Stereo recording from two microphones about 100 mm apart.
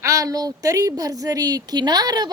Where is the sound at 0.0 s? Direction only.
35° right (ahead or behind).